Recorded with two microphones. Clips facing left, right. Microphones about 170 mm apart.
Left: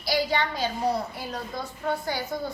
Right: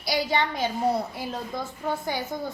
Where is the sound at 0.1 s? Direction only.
20° right (ahead or behind).